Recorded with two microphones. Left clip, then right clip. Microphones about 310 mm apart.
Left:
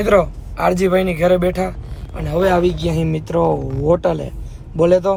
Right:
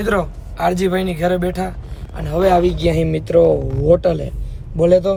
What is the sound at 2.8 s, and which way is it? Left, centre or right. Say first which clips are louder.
Speech: right 4 dB; centre.